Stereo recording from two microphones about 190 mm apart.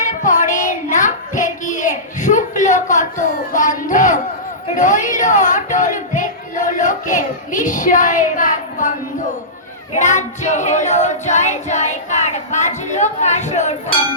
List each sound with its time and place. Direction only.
0.0 s child singing: 40° left (ahead or behind)
4.7 s speech: 40° left (ahead or behind)
9.9 s female singing: 40° left (ahead or behind)